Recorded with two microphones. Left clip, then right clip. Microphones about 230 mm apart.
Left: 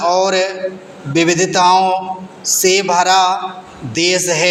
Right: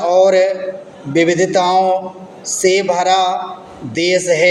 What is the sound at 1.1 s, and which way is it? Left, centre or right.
A woman's voice, centre.